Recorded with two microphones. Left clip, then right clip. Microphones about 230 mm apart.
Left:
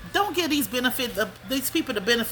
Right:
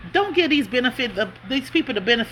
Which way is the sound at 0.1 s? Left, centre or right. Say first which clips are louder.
Right 5 dB; centre.